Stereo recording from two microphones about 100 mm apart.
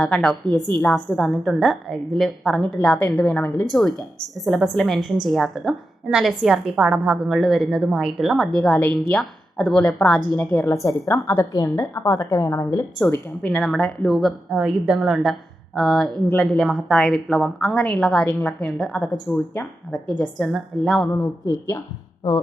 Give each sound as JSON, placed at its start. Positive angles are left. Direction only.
{"t": 0.0, "sound": "a woman's voice", "side_deg": 5}
{"t": 0.7, "sound": "a woman's voice", "side_deg": 15}
{"t": 0.9, "sound": "a woman's voice", "side_deg": 5}
{"t": 2.7, "sound": "a woman's voice", "side_deg": 15}
{"t": 3.7, "sound": "a woman's voice", "side_deg": 0}
{"t": 10.7, "sound": "a woman's voice", "side_deg": 30}
{"t": 13.1, "sound": "a woman's voice", "side_deg": 15}
{"t": 19.9, "sound": "a woman's voice", "side_deg": 0}